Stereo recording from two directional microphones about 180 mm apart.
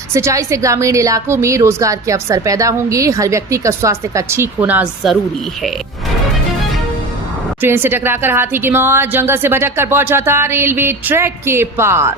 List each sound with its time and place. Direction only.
0.1 s a woman's voice: 15° right (ahead or behind)
7.6 s a woman's voice: 10° right (ahead or behind)